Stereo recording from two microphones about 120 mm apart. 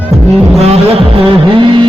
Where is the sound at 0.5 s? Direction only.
60° right (ahead or behind).